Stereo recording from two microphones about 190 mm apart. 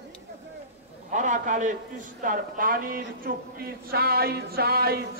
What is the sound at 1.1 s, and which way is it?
A man's voice, 40° right (ahead or behind).